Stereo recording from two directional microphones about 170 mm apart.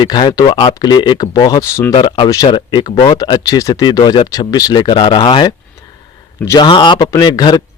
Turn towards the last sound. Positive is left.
turn(degrees=25)  # may be behind; listen again after turning